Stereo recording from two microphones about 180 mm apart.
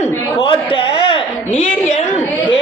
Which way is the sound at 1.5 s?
40° left (ahead or behind).